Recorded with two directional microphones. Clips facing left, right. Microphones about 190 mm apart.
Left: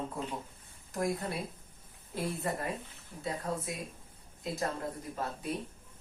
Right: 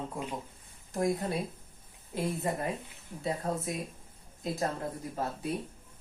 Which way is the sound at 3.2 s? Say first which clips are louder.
Right 3 dB; 30° right (ahead or behind).